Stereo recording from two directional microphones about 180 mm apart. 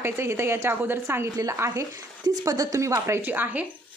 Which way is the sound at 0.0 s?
15° right (ahead or behind).